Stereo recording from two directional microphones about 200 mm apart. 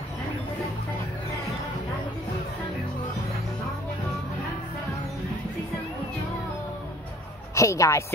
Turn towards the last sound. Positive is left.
turn(degrees=15)  # may be behind; listen again after turning